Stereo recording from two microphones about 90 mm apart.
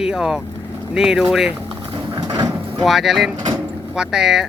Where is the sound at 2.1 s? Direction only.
45° right (ahead or behind).